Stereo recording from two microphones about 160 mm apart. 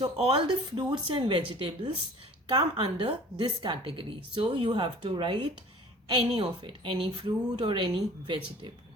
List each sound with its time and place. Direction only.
0.0 s a woman's voice: 30° right (ahead or behind)